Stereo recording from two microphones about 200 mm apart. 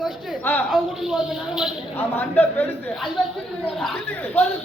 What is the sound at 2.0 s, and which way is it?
Speech, 10° left (ahead or behind).